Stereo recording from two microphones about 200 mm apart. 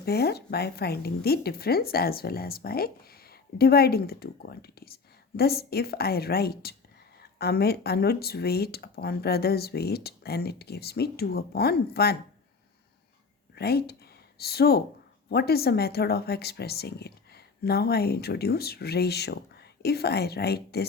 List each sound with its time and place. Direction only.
0.0 s speech: 55° left (ahead or behind)
13.6 s speech: 50° left (ahead or behind)